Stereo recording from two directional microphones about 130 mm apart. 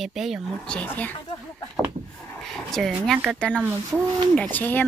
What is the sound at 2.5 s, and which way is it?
Speech, 5° left (ahead or behind).